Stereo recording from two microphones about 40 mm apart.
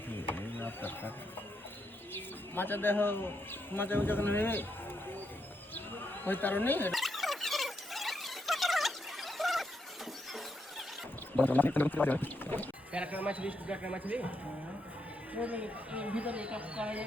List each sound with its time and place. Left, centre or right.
0.3 s mechanisms: left
2.1 s speech: left
6.2 s speech: left
6.9 s squeal: centre
11.4 s speech: left
13.1 s speech: right
15.4 s speech: right